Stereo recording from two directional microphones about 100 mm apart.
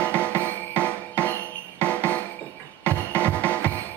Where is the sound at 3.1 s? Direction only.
15° left (ahead or behind).